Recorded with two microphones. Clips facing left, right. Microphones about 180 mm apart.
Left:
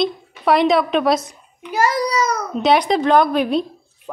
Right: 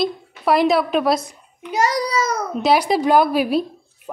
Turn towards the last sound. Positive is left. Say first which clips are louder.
# left 1 dB
turn(degrees=-5)  # may be behind; listen again after turning